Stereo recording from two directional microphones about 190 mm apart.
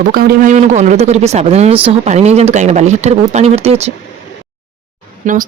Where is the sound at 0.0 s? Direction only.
50° right (ahead or behind); by 3.9 s 35° right (ahead or behind).